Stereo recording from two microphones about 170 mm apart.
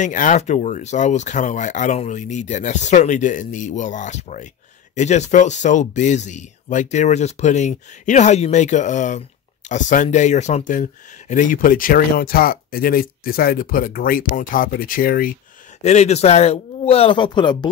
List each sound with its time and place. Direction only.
0.0 s speech: 45° left (ahead or behind)
15.8 s speech: 40° left (ahead or behind)